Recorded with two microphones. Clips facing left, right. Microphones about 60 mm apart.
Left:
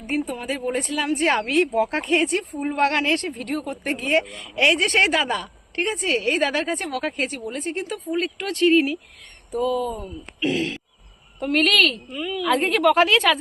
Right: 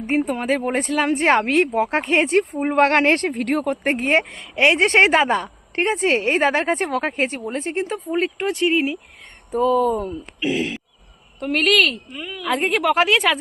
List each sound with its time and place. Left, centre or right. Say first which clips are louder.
0.2 s speech: right 5 dB; right
0.4 s speech: right 5 dB; right
3.9 s speech: right 3 dB; right; by 9.0 s centre
9.5 s speech: right 6 dB; right
10.4 s a woman's voice: right 1 dB; centre